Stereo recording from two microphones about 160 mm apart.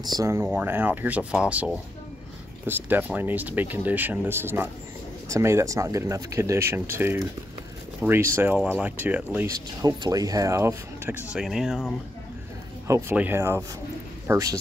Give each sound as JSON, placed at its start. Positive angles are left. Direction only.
{"t": 0.0, "sound": "speech", "side_deg": -25}
{"t": 9.8, "sound": "speech", "side_deg": -25}
{"t": 12.8, "sound": "speech", "side_deg": -15}